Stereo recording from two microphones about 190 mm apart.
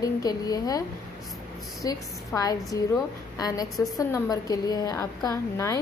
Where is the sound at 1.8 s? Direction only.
20° left (ahead or behind).